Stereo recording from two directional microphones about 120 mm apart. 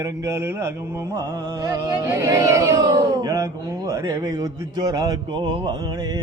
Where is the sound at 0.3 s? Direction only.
25° right (ahead or behind).